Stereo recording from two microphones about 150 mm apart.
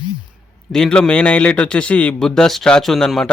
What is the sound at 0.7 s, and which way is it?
Speech, 5° left (ahead or behind).